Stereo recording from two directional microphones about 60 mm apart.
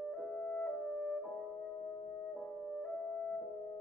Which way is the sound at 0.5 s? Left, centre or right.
Left.